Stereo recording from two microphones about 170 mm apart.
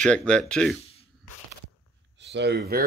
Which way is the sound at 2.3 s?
80° right.